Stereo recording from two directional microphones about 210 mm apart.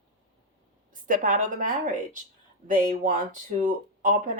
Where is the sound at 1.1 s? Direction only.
40° right (ahead or behind).